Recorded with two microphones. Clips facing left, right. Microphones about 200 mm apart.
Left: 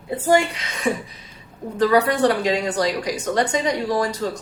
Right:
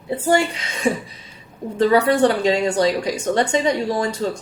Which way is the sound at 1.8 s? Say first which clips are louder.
Right 2 dB; 30° right (ahead or behind).